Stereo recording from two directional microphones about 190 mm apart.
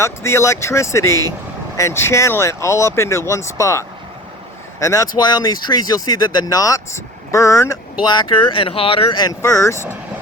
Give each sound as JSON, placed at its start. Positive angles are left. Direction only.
{"t": 0.0, "sound": "speech", "side_deg": 15}